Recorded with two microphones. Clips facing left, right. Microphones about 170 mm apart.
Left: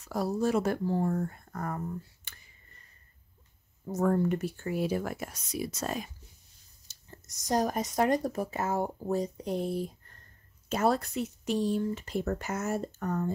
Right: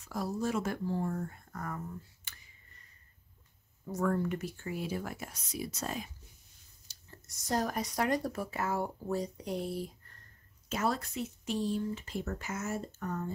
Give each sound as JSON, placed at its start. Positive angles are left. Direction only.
{"t": 0.4, "sound": "speech", "side_deg": 60}
{"t": 0.7, "sound": "speech", "side_deg": 45}
{"t": 3.8, "sound": "speech", "side_deg": 25}
{"t": 4.6, "sound": "speech", "side_deg": 65}
{"t": 7.1, "sound": "speech", "side_deg": 20}
{"t": 10.8, "sound": "speech", "side_deg": 60}